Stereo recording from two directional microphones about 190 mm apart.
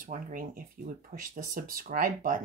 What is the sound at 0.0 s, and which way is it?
Speech, 45° right (ahead or behind).